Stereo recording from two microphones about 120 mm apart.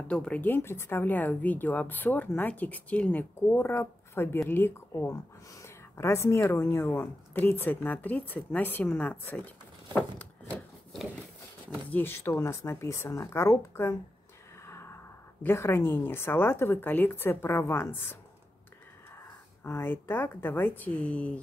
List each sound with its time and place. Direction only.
0.1 s speech: 10° left (ahead or behind)
9.9 s a sound: 10° left (ahead or behind)
11.9 s a woman's voice: 20° left (ahead or behind)
14.6 s a sound: 20° left (ahead or behind)
15.4 s a woman's voice: 20° left (ahead or behind)
19.6 s speech: 20° left (ahead or behind)